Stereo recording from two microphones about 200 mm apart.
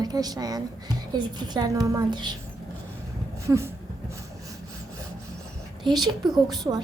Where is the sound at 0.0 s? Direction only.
20° right (ahead or behind).